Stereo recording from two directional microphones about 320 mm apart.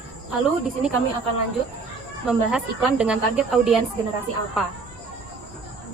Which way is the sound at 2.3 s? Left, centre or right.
Centre.